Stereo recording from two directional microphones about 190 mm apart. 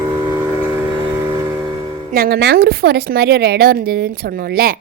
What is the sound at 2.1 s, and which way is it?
A woman's voice, 55° right (ahead or behind).